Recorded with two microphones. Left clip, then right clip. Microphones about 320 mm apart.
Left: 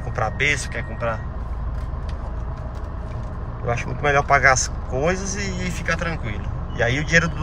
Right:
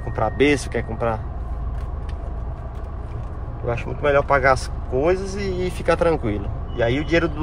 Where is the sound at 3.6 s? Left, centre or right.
Centre.